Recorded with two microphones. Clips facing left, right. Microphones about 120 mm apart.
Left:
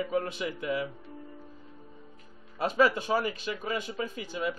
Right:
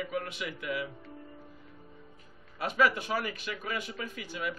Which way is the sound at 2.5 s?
30° left (ahead or behind).